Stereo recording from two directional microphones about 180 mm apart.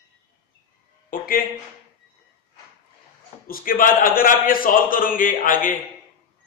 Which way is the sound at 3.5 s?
55° left (ahead or behind).